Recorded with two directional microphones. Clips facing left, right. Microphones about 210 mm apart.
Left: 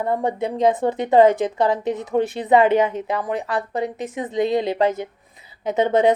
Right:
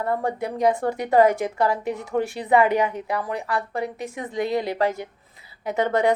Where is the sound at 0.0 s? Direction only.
20° left (ahead or behind).